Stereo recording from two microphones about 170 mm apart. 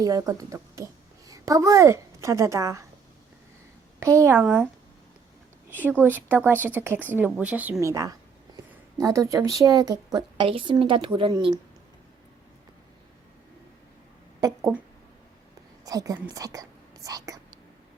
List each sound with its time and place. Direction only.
0.0 s a woman's voice: 20° right (ahead or behind)
4.0 s a woman's voice: 15° right (ahead or behind)
5.8 s a woman's voice: 10° right (ahead or behind); by 11.6 s 25° right (ahead or behind)
15.8 s a woman's voice: 20° right (ahead or behind)